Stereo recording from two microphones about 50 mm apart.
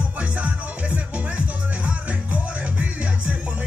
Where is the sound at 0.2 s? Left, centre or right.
Right.